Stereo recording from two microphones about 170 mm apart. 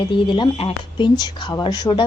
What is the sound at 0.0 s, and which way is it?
Speech, 30° left (ahead or behind).